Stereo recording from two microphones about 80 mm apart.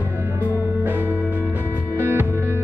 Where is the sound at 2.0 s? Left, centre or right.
Right.